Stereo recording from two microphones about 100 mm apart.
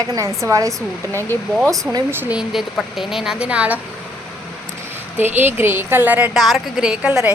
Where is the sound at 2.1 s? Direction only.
20° right (ahead or behind).